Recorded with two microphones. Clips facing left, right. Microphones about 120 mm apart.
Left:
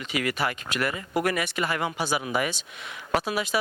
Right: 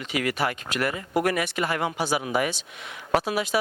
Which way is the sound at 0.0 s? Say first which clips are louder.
Right 1 dB; 55° right (ahead or behind).